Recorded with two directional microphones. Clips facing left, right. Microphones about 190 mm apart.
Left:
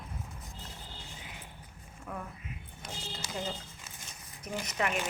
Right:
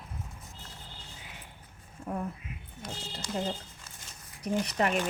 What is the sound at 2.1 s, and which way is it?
Speech, 35° right (ahead or behind).